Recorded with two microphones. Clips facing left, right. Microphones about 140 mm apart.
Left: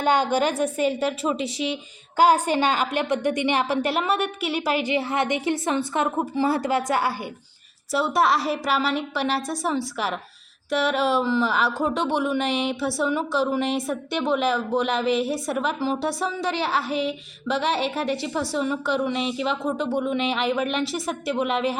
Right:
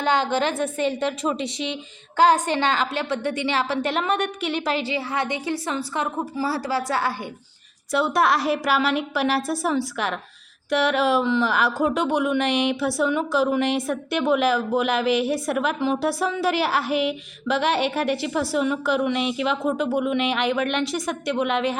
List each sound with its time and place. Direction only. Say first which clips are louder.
0.0 s a woman's voice: left 1 dB; 10° left (ahead or behind)
7.9 s speech: right 1 dB; centre (ahead or behind)